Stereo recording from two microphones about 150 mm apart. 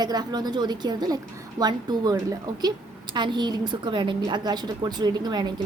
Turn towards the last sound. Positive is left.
turn(degrees=-25)  # may be behind; listen again after turning